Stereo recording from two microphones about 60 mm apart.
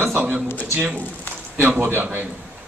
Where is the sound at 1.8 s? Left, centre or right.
Right.